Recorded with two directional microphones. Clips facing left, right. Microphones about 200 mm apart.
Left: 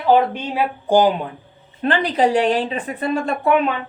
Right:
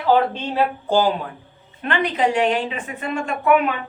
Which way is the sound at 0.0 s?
15° left (ahead or behind).